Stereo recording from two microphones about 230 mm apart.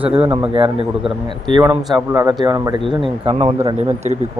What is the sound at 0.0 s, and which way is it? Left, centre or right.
Speech, right.